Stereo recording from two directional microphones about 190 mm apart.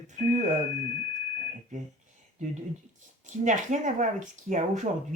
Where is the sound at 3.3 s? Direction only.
40° right (ahead or behind).